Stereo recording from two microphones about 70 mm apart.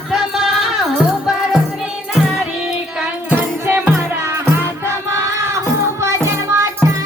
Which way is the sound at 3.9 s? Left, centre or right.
Right.